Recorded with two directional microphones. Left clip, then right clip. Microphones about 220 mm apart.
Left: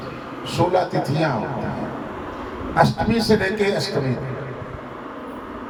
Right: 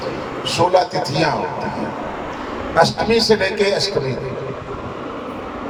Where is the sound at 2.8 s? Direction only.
50° right (ahead or behind).